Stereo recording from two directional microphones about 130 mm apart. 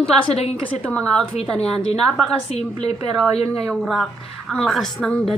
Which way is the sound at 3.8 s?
Centre (ahead or behind).